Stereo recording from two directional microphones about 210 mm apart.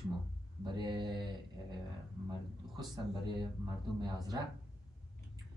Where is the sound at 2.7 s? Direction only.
20° right (ahead or behind).